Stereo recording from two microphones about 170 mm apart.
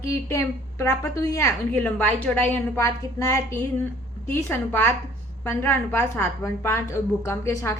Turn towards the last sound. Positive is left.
turn(degrees=15)  # may be behind; listen again after turning